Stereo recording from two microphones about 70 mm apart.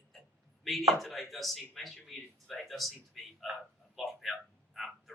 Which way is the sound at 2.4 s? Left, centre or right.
Centre.